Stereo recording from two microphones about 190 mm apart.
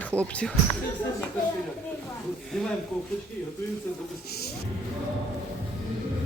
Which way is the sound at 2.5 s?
Centre (ahead or behind).